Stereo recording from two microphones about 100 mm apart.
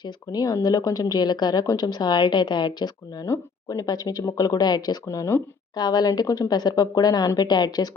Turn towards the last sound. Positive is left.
turn(degrees=45)  # may be behind; listen again after turning